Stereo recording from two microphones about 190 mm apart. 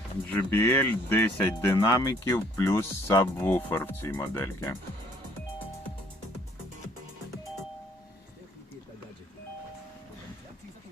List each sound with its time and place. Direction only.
0.3 s speech: 10° left (ahead or behind)